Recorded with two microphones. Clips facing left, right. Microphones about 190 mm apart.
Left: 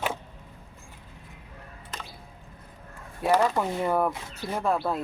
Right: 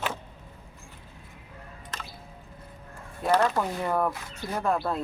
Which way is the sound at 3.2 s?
10° left (ahead or behind).